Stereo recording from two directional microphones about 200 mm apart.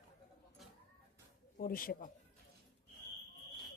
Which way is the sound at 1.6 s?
45° left (ahead or behind).